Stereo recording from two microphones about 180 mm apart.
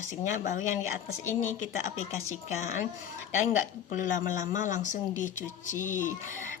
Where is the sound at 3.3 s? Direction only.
45° left (ahead or behind).